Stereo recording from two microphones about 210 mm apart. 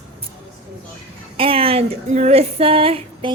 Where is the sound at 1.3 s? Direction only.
25° right (ahead or behind).